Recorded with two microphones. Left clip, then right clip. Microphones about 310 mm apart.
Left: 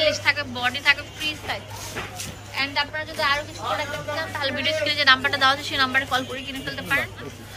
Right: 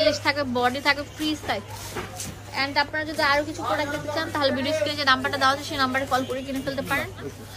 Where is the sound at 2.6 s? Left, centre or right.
Right.